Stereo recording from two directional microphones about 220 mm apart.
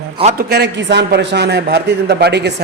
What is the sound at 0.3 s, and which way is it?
A man's voice, 45° right (ahead or behind).